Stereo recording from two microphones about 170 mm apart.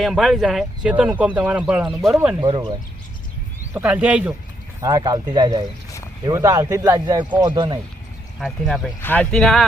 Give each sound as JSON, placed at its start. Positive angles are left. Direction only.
{"t": 0.0, "sound": "speech", "side_deg": 0}
{"t": 2.4, "sound": "speech", "side_deg": -25}
{"t": 3.8, "sound": "speech", "side_deg": -10}
{"t": 4.8, "sound": "speech", "side_deg": -20}
{"t": 8.4, "sound": "speech", "side_deg": 0}